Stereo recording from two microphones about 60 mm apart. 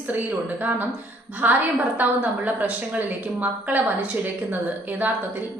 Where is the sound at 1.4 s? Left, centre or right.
Right.